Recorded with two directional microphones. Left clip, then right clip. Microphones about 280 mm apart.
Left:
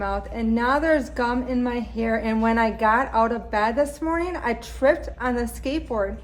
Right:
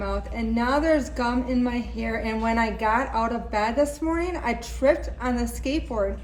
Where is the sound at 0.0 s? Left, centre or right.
Centre.